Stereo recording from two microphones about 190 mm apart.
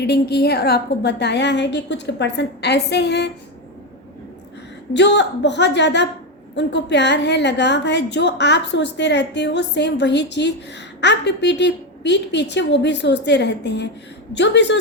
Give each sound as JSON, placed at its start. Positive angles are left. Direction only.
{"t": 0.0, "sound": "a woman's voice", "side_deg": 60}
{"t": 4.9, "sound": "a woman's voice", "side_deg": 65}